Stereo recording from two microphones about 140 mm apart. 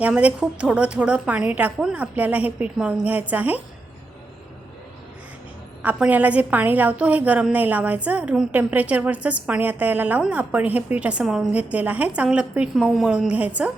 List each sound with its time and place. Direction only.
0.0 s a woman's voice: 10° right (ahead or behind)
5.8 s a woman's voice: 10° right (ahead or behind)